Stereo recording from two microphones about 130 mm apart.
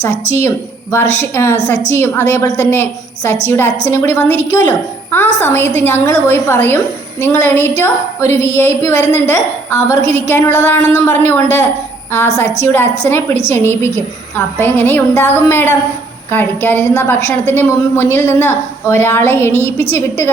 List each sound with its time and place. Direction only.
0.3 s a woman's voice: 15° left (ahead or behind)